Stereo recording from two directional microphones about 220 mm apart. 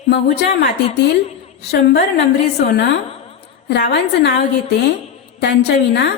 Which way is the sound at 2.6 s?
50° left (ahead or behind).